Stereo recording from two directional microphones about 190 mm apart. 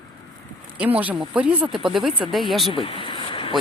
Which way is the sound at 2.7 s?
25° left (ahead or behind).